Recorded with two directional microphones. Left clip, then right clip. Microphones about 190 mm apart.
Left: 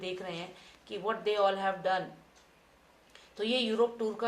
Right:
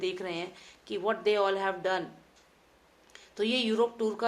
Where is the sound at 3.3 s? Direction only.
45° right (ahead or behind).